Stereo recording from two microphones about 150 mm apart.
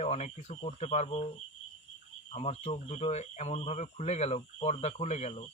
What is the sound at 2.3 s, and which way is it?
Speech, 45° left (ahead or behind).